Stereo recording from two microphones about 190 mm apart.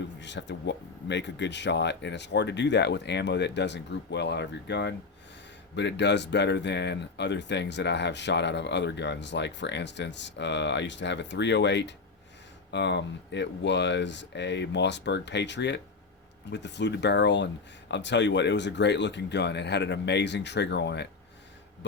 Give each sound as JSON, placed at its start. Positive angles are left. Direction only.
{"t": 0.2, "sound": "speech", "side_deg": 70}